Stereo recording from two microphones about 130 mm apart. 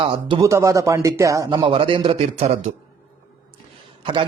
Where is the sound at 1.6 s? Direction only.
45° right (ahead or behind).